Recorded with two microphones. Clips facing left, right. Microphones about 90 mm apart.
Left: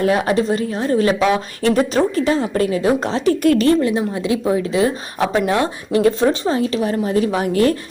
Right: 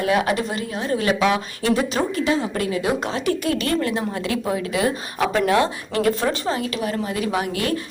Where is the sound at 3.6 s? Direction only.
20° left (ahead or behind).